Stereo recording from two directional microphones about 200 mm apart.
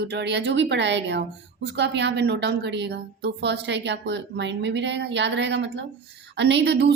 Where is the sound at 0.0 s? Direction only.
60° right (ahead or behind).